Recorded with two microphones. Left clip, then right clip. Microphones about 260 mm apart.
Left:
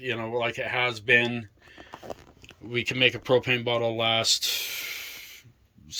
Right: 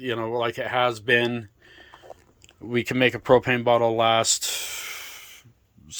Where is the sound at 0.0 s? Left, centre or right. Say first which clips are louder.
Right 3 dB; centre.